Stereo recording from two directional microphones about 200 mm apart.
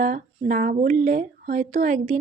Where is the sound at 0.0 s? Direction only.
40° right (ahead or behind).